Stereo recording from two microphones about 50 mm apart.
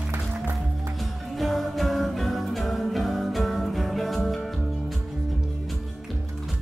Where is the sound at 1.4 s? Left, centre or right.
Centre.